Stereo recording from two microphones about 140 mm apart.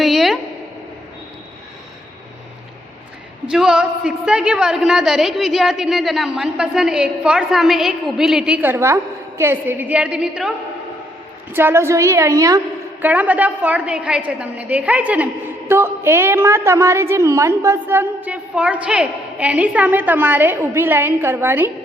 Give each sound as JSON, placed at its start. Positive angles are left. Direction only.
{"t": 0.0, "sound": "a sound", "side_deg": 0}
{"t": 3.4, "sound": "a woman's voice", "side_deg": -5}
{"t": 11.5, "sound": "a woman's voice", "side_deg": -15}
{"t": 13.1, "sound": "a woman's voice", "side_deg": -10}